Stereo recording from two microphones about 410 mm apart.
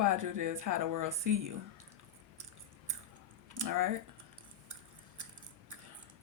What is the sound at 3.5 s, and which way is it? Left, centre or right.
Speech, right.